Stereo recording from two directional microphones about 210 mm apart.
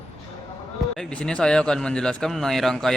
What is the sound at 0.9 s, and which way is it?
Speech, 5° left (ahead or behind).